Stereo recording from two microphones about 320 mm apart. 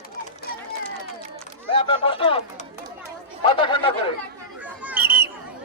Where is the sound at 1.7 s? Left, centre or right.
Centre.